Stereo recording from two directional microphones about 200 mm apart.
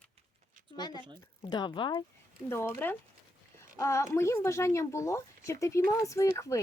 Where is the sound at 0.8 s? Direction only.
20° left (ahead or behind).